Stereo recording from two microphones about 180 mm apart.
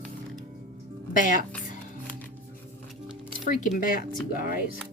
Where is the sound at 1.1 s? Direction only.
45° left (ahead or behind).